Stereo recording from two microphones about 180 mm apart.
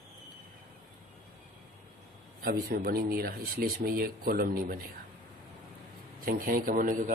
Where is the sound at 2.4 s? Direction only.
60° right (ahead or behind).